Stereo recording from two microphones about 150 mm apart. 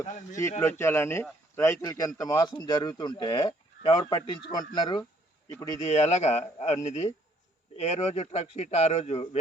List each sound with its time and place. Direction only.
0.0 s speech: 55° left (ahead or behind)
0.6 s speech: 15° left (ahead or behind)
5.8 s a man's voice: 50° left (ahead or behind)